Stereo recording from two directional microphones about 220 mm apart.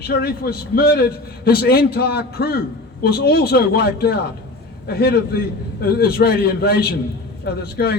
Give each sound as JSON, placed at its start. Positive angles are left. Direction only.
{"t": 0.1, "sound": "a man's voice", "side_deg": 45}